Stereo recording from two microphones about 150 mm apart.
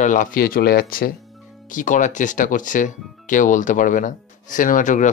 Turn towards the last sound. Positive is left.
turn(degrees=55)  # may be behind; listen again after turning